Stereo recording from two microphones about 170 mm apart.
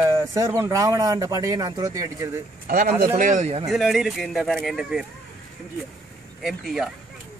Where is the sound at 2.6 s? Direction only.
55° right (ahead or behind); by 3.6 s 40° right (ahead or behind).